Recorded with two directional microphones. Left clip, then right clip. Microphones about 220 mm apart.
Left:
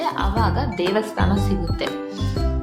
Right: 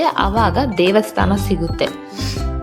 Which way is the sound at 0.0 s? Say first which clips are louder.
Right 7 dB; 35° right (ahead or behind).